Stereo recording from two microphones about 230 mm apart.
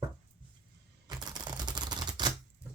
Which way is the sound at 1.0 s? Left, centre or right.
Centre.